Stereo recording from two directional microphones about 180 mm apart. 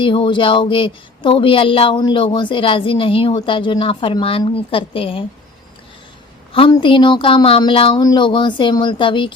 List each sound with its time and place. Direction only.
0.0 s speech: 25° left (ahead or behind)
6.5 s speech: 25° left (ahead or behind)